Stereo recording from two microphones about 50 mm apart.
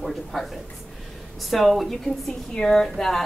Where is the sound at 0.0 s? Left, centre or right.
Centre.